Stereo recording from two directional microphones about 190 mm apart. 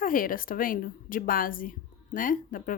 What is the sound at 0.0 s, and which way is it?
Speech, 45° left (ahead or behind).